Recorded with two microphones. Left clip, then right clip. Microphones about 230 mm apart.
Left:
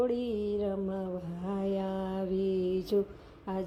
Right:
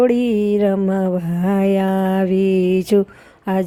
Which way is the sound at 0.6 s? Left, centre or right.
Right.